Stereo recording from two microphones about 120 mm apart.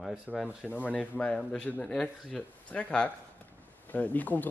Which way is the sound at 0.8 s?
10° left (ahead or behind).